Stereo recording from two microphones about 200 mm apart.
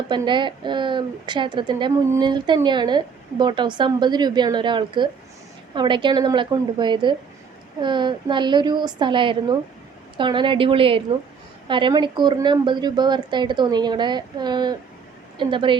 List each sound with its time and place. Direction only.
0.1 s a woman's voice: 20° right (ahead or behind)